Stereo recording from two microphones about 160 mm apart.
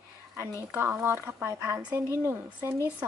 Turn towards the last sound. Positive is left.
turn(degrees=-15)  # may be behind; listen again after turning